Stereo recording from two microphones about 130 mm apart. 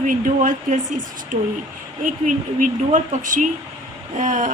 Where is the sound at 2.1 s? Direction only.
80° right.